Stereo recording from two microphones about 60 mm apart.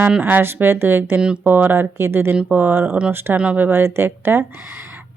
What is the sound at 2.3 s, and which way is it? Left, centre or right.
Speech, right.